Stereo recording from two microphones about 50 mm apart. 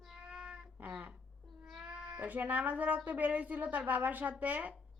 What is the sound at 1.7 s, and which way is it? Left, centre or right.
Cat, centre.